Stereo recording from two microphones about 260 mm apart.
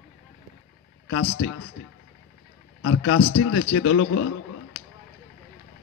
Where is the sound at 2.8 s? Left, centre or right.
Left.